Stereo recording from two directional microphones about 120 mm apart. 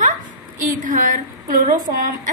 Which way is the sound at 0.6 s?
90° right.